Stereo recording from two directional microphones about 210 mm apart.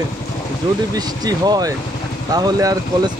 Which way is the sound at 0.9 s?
20° right (ahead or behind).